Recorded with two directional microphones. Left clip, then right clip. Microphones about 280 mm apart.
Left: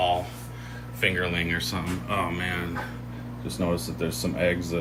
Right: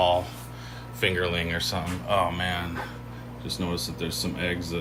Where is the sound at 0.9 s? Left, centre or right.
Centre.